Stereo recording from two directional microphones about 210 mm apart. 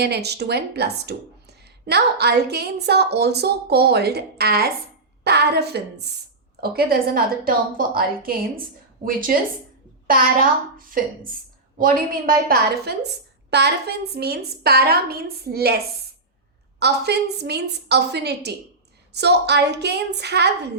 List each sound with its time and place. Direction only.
0.0 s a woman's voice: 50° right (ahead or behind)
16.8 s a woman's voice: 50° right (ahead or behind)